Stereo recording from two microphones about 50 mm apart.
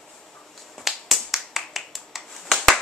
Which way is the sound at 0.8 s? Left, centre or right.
Centre.